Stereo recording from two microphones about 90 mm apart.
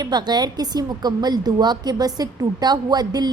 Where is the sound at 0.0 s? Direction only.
50° right (ahead or behind).